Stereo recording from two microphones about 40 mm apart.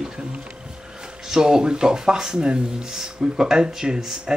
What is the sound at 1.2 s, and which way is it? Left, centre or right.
Speech, centre.